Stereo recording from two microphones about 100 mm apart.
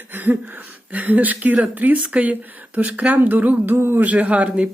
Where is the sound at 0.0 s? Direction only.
20° right (ahead or behind).